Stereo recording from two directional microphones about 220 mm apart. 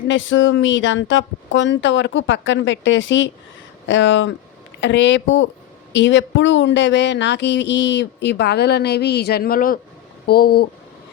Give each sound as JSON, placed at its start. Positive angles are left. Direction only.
{"t": 0.1, "sound": "speech", "side_deg": 60}